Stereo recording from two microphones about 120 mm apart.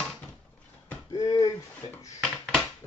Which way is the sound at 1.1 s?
30° left (ahead or behind).